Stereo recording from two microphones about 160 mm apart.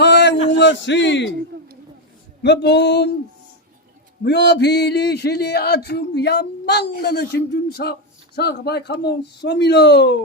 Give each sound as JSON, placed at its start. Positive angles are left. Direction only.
{"t": 0.0, "sound": "a sound", "side_deg": 90}
{"t": 2.4, "sound": "speech", "side_deg": 90}
{"t": 4.2, "sound": "speech", "side_deg": 90}